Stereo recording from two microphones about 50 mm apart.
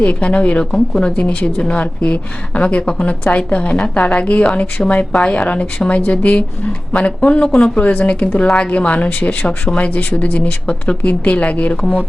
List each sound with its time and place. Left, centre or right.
0.0 s a woman's voice: left
7.8 s a woman's voice: left